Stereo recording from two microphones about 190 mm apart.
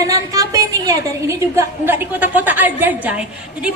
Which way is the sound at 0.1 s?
15° right (ahead or behind).